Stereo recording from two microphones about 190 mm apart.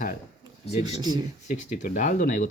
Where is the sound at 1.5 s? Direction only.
40° left (ahead or behind).